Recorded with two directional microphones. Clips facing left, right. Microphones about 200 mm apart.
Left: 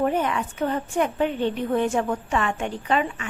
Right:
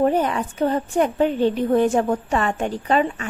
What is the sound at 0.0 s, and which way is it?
Speech, 35° right (ahead or behind).